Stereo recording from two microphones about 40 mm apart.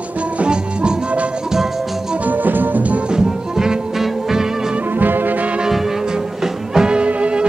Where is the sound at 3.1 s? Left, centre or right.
Centre.